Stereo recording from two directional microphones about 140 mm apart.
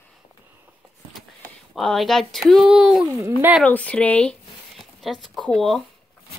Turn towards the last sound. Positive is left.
turn(degrees=5)  # may be behind; listen again after turning